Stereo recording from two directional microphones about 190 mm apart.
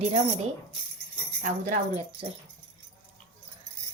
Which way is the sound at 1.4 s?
40° right (ahead or behind).